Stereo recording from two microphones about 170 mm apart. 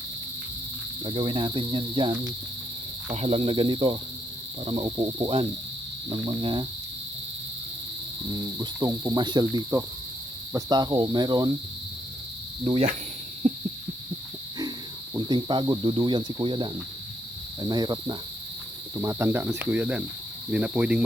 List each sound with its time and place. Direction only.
1.0 s speech: 35° right (ahead or behind)
8.3 s speech: 25° right (ahead or behind)
13.4 s owl: 40° right (ahead or behind)
15.1 s speech: 25° right (ahead or behind); by 21.0 s 10° right (ahead or behind)